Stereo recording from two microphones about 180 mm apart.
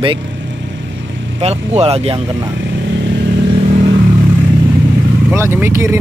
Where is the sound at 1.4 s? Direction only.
35° right (ahead or behind).